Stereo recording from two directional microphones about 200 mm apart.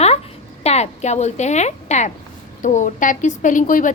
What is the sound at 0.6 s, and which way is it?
A woman's voice, 35° left (ahead or behind).